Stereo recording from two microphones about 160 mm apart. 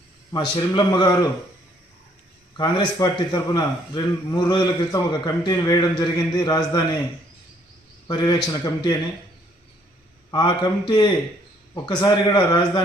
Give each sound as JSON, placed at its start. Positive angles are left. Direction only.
{"t": 0.3, "sound": "a man's voice", "side_deg": 30}
{"t": 2.6, "sound": "a man's voice", "side_deg": 25}
{"t": 8.0, "sound": "a man's voice", "side_deg": 25}
{"t": 10.3, "sound": "a man's voice", "side_deg": 30}